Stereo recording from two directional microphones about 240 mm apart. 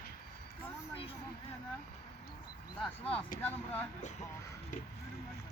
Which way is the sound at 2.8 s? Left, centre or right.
Centre.